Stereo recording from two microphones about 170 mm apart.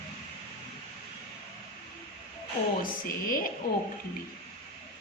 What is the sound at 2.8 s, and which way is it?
Speech, 55° left (ahead or behind).